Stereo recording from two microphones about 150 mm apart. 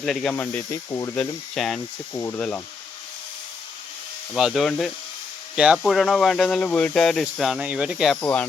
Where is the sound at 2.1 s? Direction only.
20° left (ahead or behind).